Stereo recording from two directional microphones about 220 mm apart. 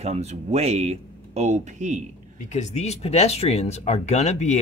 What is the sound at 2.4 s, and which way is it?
Speech, 35° left (ahead or behind).